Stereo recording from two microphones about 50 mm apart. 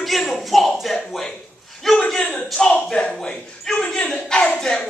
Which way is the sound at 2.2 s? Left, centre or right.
Centre.